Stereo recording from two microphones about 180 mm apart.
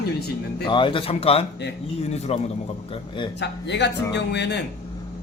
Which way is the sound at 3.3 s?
70° left (ahead or behind).